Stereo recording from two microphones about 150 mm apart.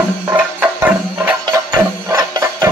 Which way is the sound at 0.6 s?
10° right (ahead or behind).